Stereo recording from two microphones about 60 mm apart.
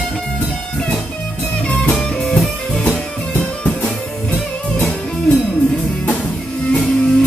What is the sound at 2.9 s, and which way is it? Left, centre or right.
Music, left.